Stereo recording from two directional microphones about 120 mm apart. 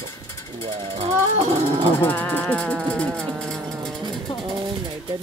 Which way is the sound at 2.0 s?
15° left (ahead or behind).